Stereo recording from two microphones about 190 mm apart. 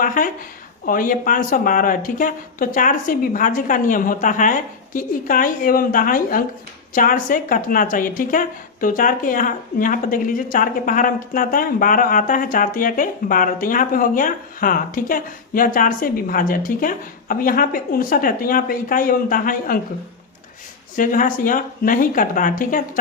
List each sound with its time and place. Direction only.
0.0 s a woman's voice: 45° left (ahead or behind)
20.9 s a woman's voice: 45° left (ahead or behind)